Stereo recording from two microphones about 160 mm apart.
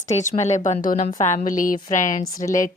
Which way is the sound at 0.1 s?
45° left (ahead or behind).